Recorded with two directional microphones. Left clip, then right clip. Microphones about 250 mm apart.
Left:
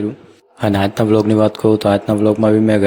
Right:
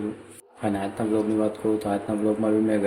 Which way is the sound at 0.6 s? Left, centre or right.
Left.